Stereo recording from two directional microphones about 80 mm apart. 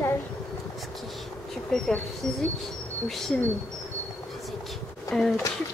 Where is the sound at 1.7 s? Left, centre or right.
Centre.